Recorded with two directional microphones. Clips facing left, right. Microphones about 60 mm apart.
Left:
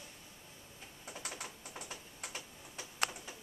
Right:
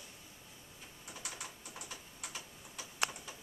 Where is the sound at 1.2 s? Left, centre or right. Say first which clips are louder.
Left 1 dB; left.